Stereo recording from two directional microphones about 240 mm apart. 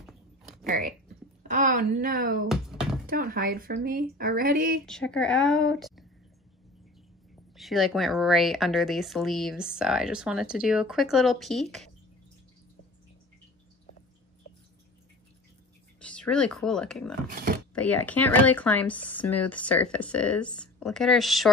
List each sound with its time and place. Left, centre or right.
1.5 s speech: right
2.4 s a sound: centre
3.1 s speech: right
4.8 s speech: centre
7.5 s speech: centre
16.0 s speech: centre